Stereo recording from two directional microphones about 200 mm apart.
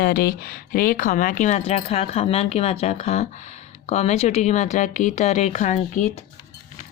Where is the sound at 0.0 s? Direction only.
50° left (ahead or behind).